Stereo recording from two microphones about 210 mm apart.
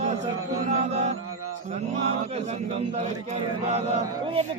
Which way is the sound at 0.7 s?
30° right (ahead or behind).